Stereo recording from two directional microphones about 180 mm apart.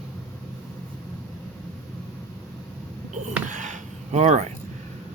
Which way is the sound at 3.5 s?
40° right (ahead or behind).